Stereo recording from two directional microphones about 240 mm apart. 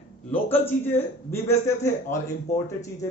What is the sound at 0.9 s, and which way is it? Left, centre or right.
A man's voice, centre.